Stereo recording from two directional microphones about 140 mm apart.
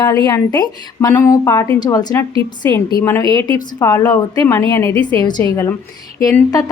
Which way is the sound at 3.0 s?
15° left (ahead or behind).